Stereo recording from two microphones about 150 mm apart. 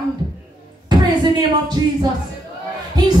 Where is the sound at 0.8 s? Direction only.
30° right (ahead or behind).